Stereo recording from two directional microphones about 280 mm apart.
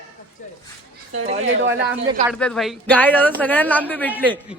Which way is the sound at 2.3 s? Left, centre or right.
Centre.